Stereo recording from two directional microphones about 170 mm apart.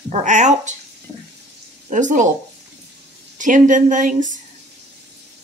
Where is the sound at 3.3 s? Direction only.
50° right (ahead or behind).